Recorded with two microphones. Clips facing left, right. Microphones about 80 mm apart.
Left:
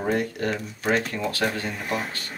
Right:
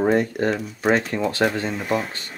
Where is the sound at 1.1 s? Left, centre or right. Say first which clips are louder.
Right 5 dB; right.